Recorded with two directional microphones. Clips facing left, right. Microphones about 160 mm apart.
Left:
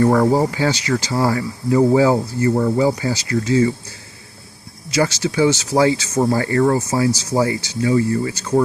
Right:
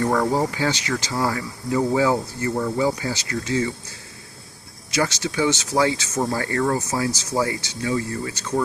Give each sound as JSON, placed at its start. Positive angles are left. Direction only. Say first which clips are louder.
{"t": 0.0, "sound": "speech", "louder": "left 6 dB", "side_deg": 40}
{"t": 4.9, "sound": "speech", "louder": "left 5 dB", "side_deg": 30}